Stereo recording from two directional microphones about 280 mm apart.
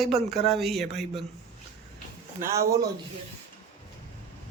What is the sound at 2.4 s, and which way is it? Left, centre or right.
Speech, centre.